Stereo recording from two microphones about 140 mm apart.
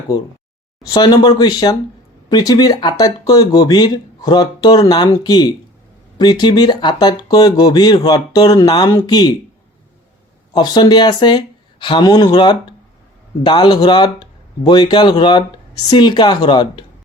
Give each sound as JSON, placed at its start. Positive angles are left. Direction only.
{"t": 0.9, "sound": "speech", "side_deg": 25}
{"t": 10.5, "sound": "speech", "side_deg": 30}